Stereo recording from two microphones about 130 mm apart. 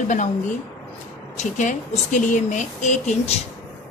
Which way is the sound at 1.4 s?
70° left (ahead or behind).